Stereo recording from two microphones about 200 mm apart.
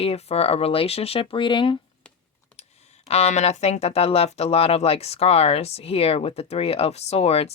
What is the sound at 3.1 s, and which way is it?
Speech, 30° left (ahead or behind).